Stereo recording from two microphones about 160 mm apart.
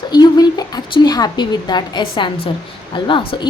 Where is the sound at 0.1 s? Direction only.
25° left (ahead or behind).